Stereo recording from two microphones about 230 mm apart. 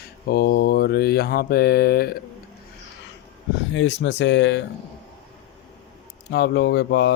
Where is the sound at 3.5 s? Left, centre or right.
Left.